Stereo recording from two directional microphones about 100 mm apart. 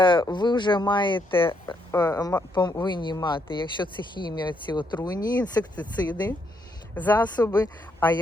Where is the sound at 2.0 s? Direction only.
35° left (ahead or behind).